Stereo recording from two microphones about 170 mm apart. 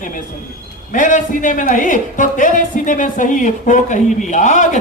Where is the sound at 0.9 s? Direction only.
50° left (ahead or behind).